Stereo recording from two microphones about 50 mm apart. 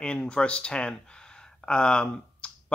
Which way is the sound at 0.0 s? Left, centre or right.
Left.